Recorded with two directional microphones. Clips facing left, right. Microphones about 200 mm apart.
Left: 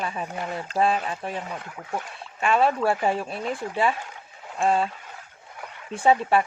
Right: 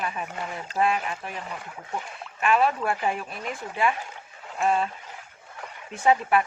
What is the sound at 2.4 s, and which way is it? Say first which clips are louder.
Speech: left 1 dB; 30° left (ahead or behind).